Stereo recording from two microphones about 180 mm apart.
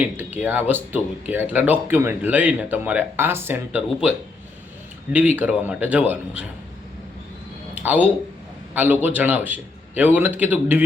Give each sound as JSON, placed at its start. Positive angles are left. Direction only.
{"t": 0.3, "sound": "speech", "side_deg": -10}
{"t": 5.1, "sound": "speech", "side_deg": -10}
{"t": 7.8, "sound": "speech", "side_deg": -10}